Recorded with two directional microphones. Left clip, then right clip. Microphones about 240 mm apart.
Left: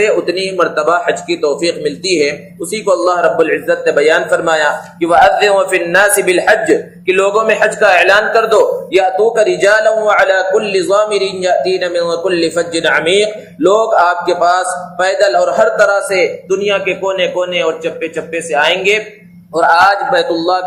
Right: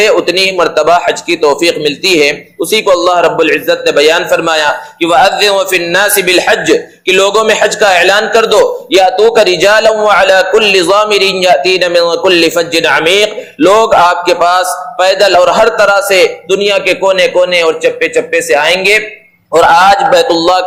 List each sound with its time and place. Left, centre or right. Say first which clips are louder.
0.0 s a man's voice: right 5 dB; right